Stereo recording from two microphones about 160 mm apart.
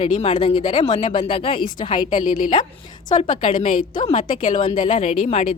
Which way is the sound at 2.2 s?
55° left (ahead or behind).